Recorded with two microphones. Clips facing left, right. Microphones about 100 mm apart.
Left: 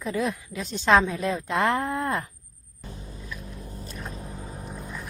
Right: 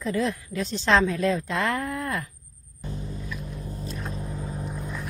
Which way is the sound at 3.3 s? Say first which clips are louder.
Right 3 dB; centre (ahead or behind).